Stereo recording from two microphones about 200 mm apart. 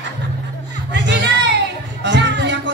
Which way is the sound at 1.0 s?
60° right (ahead or behind).